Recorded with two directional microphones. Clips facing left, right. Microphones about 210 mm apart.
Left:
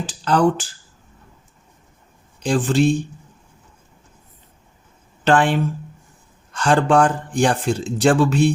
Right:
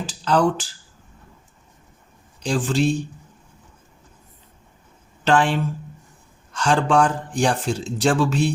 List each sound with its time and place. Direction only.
0.0 s finger snapping: 50° left (ahead or behind)
2.4 s speech: 50° left (ahead or behind)
5.2 s speech: 55° left (ahead or behind)